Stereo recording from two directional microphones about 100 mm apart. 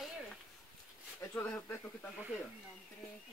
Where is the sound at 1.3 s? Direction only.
15° left (ahead or behind).